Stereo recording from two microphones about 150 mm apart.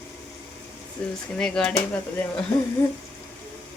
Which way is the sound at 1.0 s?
10° left (ahead or behind).